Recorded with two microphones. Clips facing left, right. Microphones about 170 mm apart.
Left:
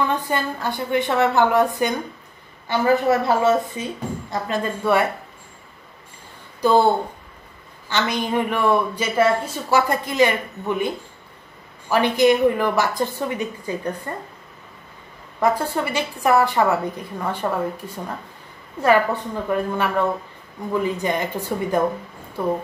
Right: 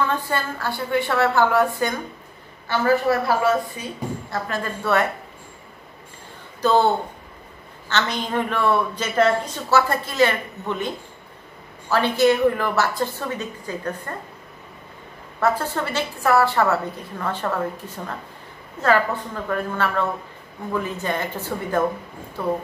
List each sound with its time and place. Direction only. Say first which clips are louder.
0.0 s a man's voice: left 1 dB; 15° left (ahead or behind)
6.6 s a man's voice: left 2 dB; 10° left (ahead or behind)
7.9 s a man's voice: left 2 dB; 10° left (ahead or behind)
15.4 s a man's voice: left 2 dB; 10° left (ahead or behind)
19.4 s a man's voice: left 2 dB; 15° left (ahead or behind)